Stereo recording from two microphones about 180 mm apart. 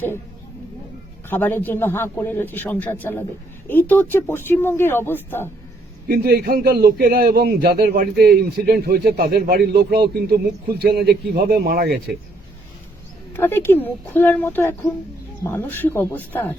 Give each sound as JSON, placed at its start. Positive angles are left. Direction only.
{"t": 1.3, "sound": "a man's voice", "side_deg": 10}
{"t": 6.1, "sound": "a man's voice", "side_deg": -60}
{"t": 13.3, "sound": "a man's voice", "side_deg": 10}